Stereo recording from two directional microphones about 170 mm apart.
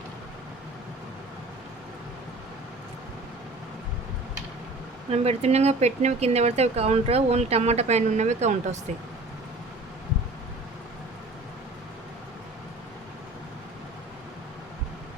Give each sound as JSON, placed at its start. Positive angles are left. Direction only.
{"t": 5.1, "sound": "speech", "side_deg": -35}